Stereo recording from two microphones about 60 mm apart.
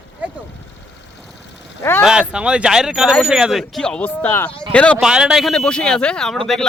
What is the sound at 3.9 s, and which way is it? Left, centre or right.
Speech, left.